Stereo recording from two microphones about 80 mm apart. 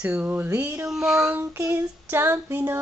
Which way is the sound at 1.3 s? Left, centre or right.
Right.